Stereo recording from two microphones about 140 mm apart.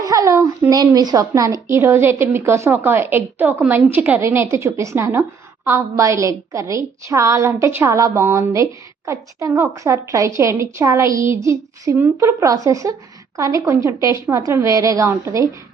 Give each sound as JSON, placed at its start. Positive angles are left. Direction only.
{"t": 0.0, "sound": "a woman's voice", "side_deg": -25}